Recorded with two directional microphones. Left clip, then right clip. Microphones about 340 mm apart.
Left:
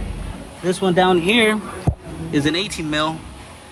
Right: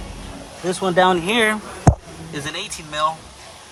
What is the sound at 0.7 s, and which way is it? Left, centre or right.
Speech, centre.